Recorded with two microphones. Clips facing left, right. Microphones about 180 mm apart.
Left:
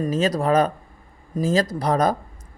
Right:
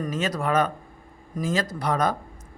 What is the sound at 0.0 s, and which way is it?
Speech, 35° left (ahead or behind).